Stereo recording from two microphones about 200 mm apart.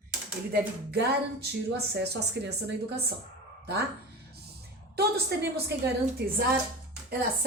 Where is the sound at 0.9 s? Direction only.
55° right (ahead or behind).